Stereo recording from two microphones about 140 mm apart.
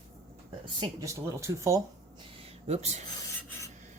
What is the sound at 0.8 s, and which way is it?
A woman's voice, 25° right (ahead or behind).